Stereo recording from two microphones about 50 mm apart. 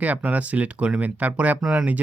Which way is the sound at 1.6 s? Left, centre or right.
Centre.